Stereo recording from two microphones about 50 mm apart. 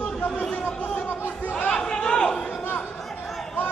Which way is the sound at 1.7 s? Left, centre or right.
Centre.